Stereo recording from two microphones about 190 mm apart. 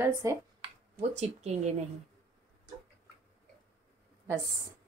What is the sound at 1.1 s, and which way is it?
Speech, 35° right (ahead or behind).